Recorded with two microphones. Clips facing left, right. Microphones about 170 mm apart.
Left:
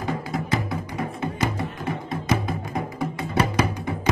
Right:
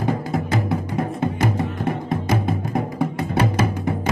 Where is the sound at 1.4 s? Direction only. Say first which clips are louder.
Right 3 dB; 50° right (ahead or behind).